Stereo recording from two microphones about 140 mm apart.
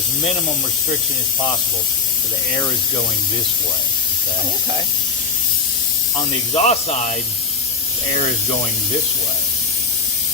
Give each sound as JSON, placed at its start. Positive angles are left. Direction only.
{"t": 6.1, "sound": "speech", "side_deg": 40}
{"t": 6.7, "sound": "speech", "side_deg": 55}